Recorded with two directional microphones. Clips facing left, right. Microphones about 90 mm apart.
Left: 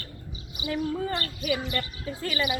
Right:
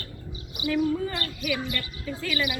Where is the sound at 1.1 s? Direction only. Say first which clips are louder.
Left 1 dB; 35° left (ahead or behind).